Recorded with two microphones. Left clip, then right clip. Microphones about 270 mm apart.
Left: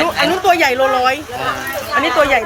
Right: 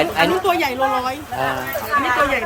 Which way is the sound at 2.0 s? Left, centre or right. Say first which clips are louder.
Left 5 dB; left.